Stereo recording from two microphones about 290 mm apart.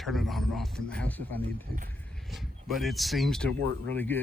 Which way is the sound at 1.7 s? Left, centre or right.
Right.